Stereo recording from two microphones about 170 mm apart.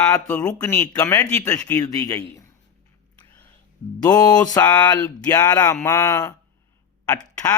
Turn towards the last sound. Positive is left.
turn(degrees=20)  # may be behind; listen again after turning